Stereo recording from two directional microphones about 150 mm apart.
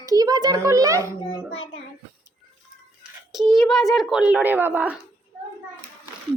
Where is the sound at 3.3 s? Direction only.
Centre (ahead or behind).